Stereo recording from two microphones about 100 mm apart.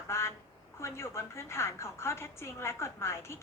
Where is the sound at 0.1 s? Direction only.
25° left (ahead or behind).